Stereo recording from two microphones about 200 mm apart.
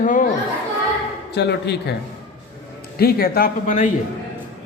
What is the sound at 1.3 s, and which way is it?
Speech, 55° left (ahead or behind).